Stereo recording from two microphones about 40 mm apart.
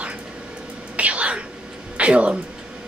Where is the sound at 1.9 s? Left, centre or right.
Right.